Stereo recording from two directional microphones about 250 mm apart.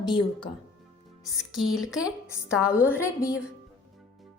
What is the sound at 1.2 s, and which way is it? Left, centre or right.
Speech, centre.